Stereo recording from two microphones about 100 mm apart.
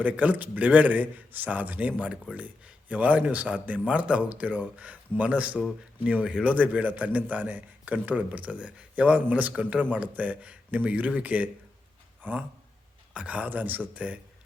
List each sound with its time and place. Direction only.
0.0 s speech: 15° right (ahead or behind)